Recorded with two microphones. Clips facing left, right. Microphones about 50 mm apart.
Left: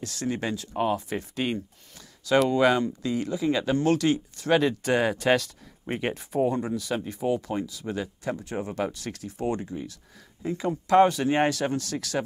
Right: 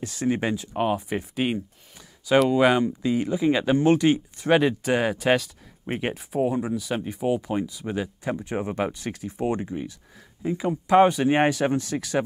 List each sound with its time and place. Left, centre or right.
0.0 s speech: centre
4.8 s speech: centre
7.2 s speech: right
10.4 s speech: centre